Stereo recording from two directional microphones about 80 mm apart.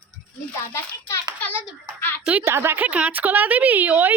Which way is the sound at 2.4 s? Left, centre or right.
Right.